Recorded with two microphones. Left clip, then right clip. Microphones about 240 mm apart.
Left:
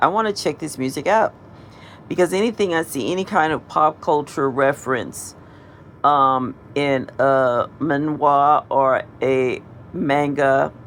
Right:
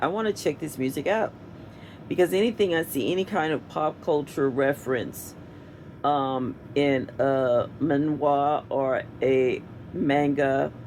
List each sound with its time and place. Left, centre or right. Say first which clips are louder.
0.0 s speech: left 8 dB; left